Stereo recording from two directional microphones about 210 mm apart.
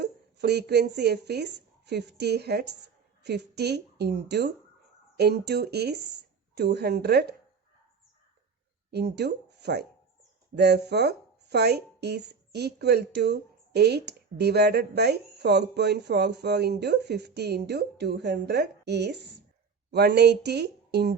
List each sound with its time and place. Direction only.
0.0 s speech: 50° right (ahead or behind)
8.9 s speech: 50° right (ahead or behind)